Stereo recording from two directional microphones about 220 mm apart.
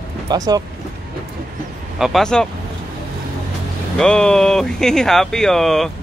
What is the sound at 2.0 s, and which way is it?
Speech, centre (ahead or behind).